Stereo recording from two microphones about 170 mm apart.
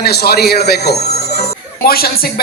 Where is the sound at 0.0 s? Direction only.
70° left (ahead or behind).